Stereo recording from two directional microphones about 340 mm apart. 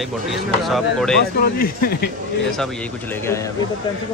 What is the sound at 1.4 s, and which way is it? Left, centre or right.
Speech, left.